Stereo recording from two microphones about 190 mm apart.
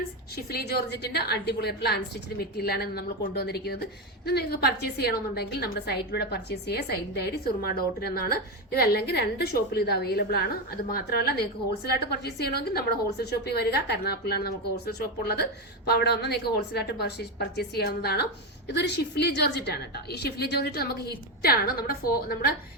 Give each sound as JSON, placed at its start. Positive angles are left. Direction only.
{"t": 0.5, "sound": "a woman's voice", "side_deg": 60}